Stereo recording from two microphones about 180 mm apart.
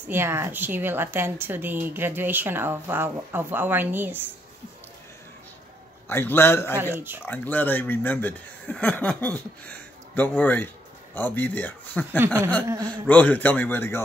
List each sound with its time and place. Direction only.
0.1 s a woman's voice: 15° right (ahead or behind)
6.0 s speech: 10° left (ahead or behind)
12.6 s a woman's voice: 20° right (ahead or behind)
13.1 s speech: 10° left (ahead or behind)